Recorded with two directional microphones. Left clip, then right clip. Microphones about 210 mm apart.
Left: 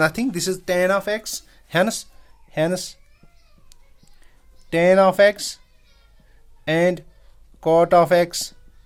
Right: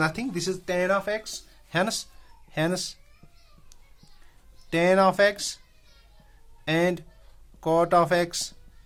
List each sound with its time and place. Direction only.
0.0 s speech: 40° left (ahead or behind)
1.8 s speech: 25° left (ahead or behind)
4.7 s speech: 25° left (ahead or behind)
6.7 s speech: 25° left (ahead or behind)